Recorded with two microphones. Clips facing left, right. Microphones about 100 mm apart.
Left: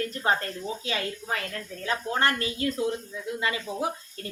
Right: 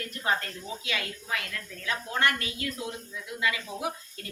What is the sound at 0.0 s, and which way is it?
A woman's voice, 35° left (ahead or behind).